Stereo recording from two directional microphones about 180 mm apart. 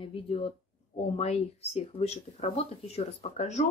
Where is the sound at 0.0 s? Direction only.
30° left (ahead or behind).